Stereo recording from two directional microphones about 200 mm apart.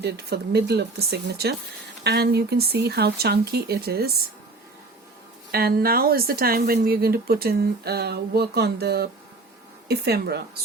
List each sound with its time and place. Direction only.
0.0 s speech: 55° right (ahead or behind)
5.5 s speech: 50° right (ahead or behind)